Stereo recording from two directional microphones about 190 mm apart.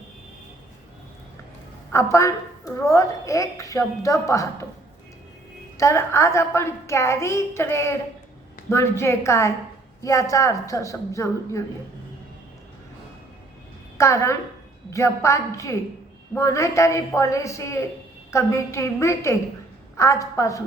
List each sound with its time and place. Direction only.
1.9 s a woman's voice: 15° left (ahead or behind)
5.7 s a woman's voice: 15° left (ahead or behind)
14.0 s a woman's voice: 15° left (ahead or behind)